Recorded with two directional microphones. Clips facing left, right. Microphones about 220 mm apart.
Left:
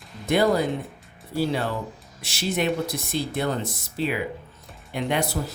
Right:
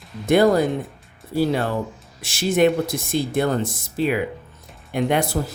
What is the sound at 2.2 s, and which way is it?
Speech, 50° right (ahead or behind).